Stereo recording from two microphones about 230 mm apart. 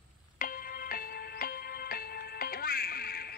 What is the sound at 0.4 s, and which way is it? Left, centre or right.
Music, left.